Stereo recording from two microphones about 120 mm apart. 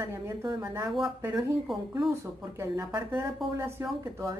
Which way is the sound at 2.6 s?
20° right (ahead or behind).